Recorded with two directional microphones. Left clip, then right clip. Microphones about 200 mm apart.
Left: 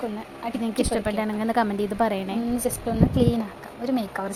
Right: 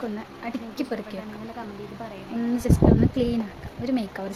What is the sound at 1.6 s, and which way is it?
Speech, 50° left (ahead or behind).